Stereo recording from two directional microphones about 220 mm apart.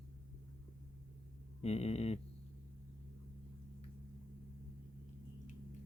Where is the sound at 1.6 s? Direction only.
30° left (ahead or behind).